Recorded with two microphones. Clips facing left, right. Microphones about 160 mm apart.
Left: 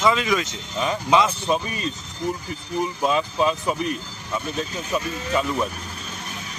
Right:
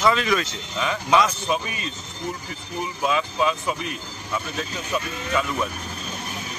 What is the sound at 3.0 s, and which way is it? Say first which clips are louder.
Speech: even; 35° left (ahead or behind).